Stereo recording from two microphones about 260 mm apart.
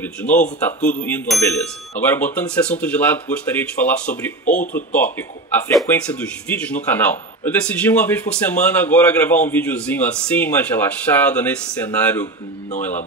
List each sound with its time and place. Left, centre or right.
0.0 s speech: centre
0.7 s speech: left
1.0 s a man's voice: centre